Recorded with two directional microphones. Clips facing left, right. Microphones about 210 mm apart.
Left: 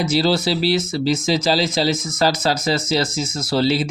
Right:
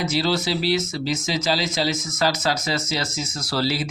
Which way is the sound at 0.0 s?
35° left (ahead or behind).